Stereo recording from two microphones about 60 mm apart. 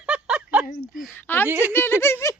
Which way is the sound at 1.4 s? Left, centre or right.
Right.